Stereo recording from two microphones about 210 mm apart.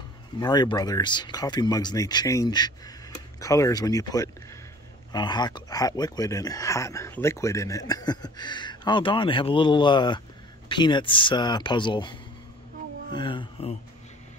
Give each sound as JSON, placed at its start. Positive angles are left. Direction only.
{"t": 0.4, "sound": "speech", "side_deg": 20}